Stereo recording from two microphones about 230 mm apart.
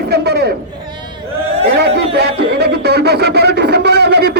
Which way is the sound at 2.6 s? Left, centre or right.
Right.